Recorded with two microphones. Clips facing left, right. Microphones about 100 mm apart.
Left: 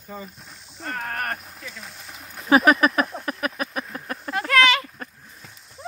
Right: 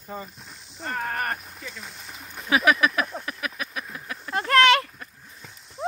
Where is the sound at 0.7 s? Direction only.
Centre (ahead or behind).